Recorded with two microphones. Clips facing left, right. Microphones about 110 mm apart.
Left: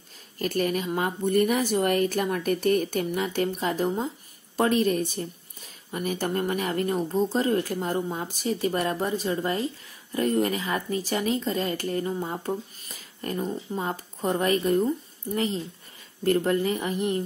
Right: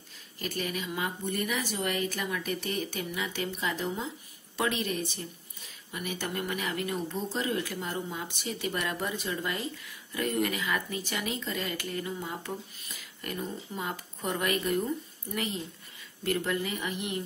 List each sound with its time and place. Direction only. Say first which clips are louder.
0.4 s a woman's voice: left 8 dB; 45° left (ahead or behind)